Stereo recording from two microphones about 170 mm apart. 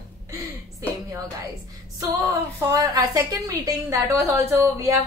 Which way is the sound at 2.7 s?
20° right (ahead or behind).